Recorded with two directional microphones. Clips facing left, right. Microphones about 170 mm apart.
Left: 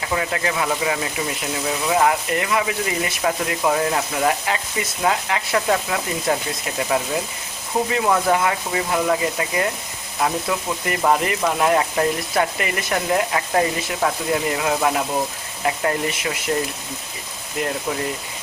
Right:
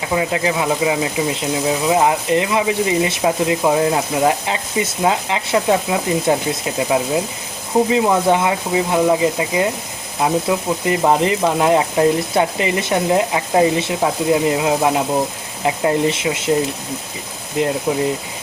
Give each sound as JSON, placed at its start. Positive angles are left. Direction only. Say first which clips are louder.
{"t": 0.1, "sound": "speech", "louder": "right 5 dB", "side_deg": -20}
{"t": 17.9, "sound": "speech", "louder": "right 6 dB", "side_deg": -25}